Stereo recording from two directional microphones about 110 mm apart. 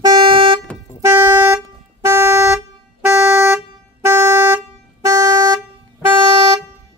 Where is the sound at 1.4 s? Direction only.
25° right (ahead or behind).